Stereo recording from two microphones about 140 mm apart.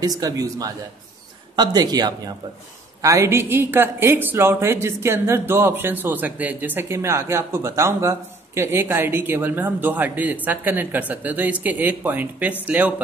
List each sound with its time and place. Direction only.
0.0 s a woman's voice: 25° right (ahead or behind); by 12.9 s 10° right (ahead or behind)